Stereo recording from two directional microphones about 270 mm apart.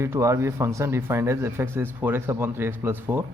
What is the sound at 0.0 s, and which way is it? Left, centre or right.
A man's voice, centre.